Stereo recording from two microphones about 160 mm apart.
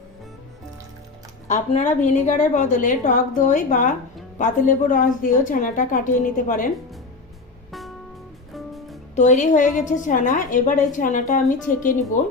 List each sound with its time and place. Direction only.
1.5 s a woman's voice: 50° left (ahead or behind)
7.7 s music: centre (ahead or behind)
9.1 s a woman's voice: 50° left (ahead or behind)